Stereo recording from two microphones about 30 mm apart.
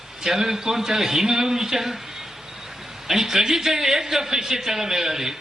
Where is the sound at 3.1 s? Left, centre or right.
Centre.